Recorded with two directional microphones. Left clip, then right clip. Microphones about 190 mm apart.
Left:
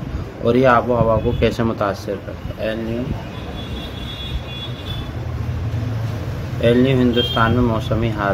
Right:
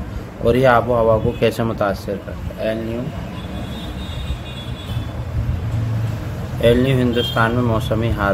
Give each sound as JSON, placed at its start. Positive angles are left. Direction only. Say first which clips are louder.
{"t": 0.5, "sound": "speech", "louder": "even", "side_deg": -15}
{"t": 6.6, "sound": "speech", "louder": "even", "side_deg": -15}